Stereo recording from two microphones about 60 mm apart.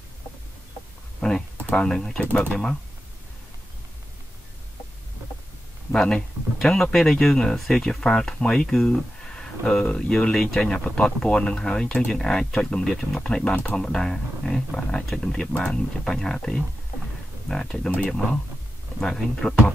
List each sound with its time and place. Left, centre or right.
1.8 s speech: centre
5.9 s speech: centre
12.8 s speech: centre
13.2 s speech: centre
18.9 s speech: centre